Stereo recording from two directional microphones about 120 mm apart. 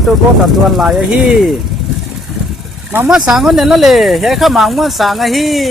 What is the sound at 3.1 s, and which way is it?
Speech, 5° right (ahead or behind).